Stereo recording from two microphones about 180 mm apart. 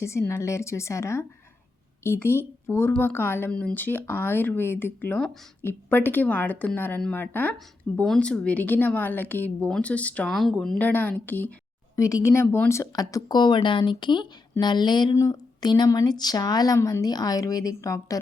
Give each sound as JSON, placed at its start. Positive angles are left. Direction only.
{"t": 0.0, "sound": "a woman's voice", "side_deg": 15}